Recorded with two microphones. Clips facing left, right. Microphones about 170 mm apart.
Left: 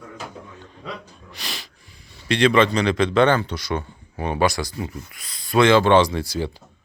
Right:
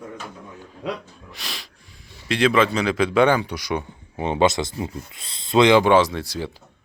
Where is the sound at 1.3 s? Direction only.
Centre (ahead or behind).